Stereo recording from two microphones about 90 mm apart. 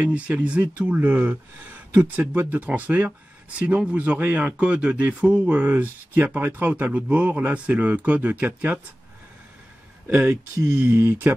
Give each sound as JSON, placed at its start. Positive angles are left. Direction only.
{"t": 0.0, "sound": "speech", "side_deg": -15}
{"t": 10.0, "sound": "speech", "side_deg": -20}